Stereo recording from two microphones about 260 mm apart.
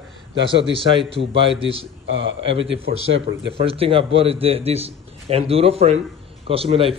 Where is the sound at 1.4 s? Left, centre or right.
Right.